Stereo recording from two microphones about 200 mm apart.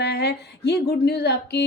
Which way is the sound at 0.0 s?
55° left (ahead or behind).